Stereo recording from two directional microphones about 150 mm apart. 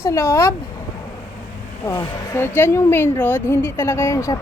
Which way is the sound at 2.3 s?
15° left (ahead or behind).